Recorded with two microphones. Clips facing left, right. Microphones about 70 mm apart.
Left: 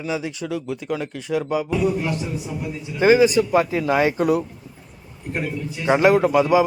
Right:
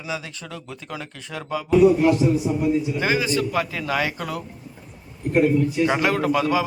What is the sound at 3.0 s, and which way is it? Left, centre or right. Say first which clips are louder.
Speech: left 7 dB; left.